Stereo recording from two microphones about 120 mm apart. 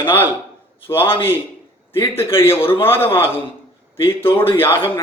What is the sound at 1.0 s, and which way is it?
Speech, 45° left (ahead or behind).